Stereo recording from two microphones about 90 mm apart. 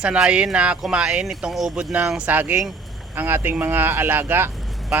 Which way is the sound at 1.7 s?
20° right (ahead or behind).